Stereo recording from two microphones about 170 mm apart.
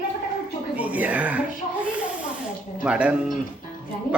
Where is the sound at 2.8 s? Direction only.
5° right (ahead or behind).